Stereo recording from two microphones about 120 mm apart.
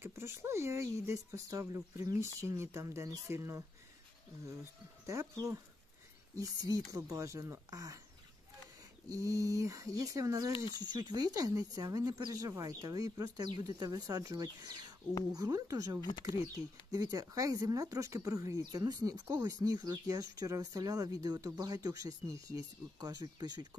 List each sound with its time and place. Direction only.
0.0 s speech: 20° right (ahead or behind)
5.0 s speech: 25° right (ahead or behind)
6.3 s speech: 30° right (ahead or behind)
9.1 s speech: 30° right (ahead or behind)
10.5 s speech: 40° left (ahead or behind)
11.1 s speech: 30° right (ahead or behind)
16.0 s speech: 40° left (ahead or behind)
16.9 s speech: 30° right (ahead or behind)